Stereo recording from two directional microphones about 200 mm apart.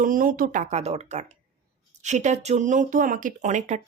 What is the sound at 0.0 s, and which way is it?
Speech, 45° right (ahead or behind).